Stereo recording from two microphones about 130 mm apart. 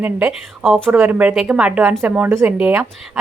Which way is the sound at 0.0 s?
10° right (ahead or behind).